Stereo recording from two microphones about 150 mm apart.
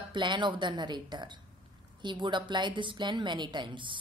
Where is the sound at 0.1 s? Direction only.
30° right (ahead or behind).